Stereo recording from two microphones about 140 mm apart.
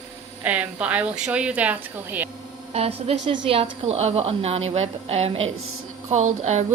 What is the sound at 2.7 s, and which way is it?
A woman's voice, 45° right (ahead or behind).